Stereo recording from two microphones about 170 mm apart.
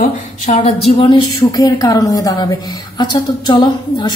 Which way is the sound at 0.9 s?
35° left (ahead or behind).